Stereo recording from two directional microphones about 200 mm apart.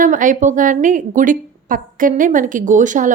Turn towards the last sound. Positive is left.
turn(degrees=-40)  # may be behind; listen again after turning